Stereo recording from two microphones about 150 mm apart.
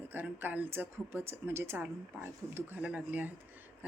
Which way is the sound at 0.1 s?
15° right (ahead or behind).